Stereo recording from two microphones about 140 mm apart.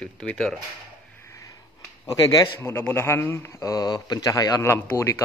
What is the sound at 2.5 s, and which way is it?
A man's voice, 15° left (ahead or behind).